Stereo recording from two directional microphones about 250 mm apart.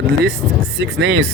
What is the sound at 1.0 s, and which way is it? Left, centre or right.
Speech, right.